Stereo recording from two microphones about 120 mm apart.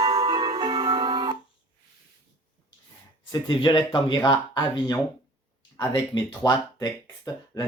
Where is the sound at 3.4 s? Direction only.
45° left (ahead or behind).